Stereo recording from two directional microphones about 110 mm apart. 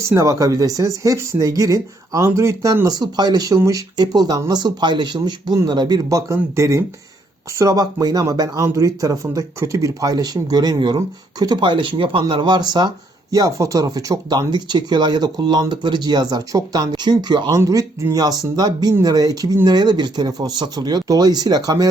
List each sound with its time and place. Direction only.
0.0 s speech: 25° right (ahead or behind); by 17.6 s 40° right (ahead or behind)
17.6 s speech: 30° right (ahead or behind)